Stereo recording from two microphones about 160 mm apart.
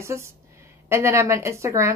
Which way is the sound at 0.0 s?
15° right (ahead or behind).